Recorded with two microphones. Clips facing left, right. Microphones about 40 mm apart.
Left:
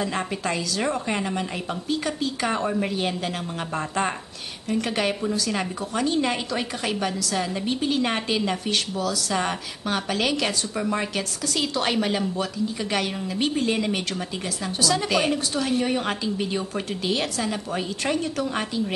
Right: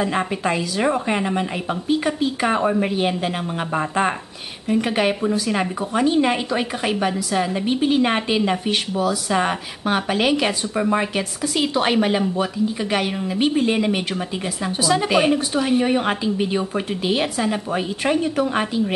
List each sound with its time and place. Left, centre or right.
0.0 s a woman's voice: centre